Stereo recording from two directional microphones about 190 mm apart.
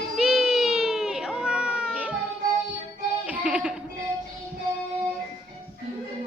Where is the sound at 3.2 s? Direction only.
5° right (ahead or behind).